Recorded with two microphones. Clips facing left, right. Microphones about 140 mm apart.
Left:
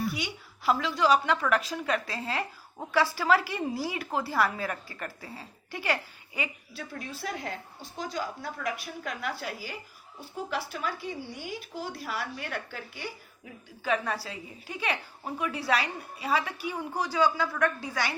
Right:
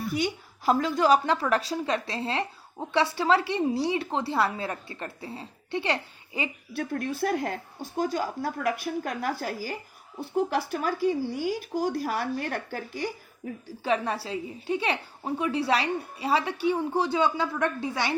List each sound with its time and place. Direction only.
0.1 s a woman's voice: 45° right (ahead or behind); by 6.5 s 30° right (ahead or behind)
6.7 s a woman's voice: 55° right (ahead or behind)
10.2 s speech: 60° right (ahead or behind)
10.7 s a woman's voice: 40° right (ahead or behind); by 18.2 s 25° right (ahead or behind)